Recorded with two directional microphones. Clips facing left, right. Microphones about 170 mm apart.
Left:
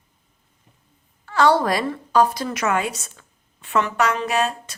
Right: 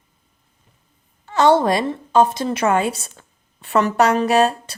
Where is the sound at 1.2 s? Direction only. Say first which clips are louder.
Right 3 dB; 20° right (ahead or behind).